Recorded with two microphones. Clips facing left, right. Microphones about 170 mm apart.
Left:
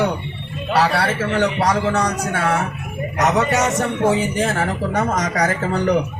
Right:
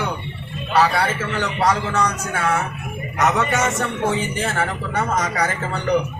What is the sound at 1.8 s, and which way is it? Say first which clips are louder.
Speech: left 3 dB; 40° left (ahead or behind).